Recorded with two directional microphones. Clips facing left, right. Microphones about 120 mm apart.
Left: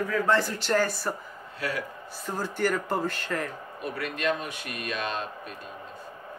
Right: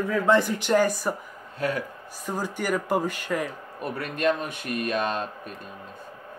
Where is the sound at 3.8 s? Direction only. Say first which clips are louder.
Right 4 dB; 50° right (ahead or behind).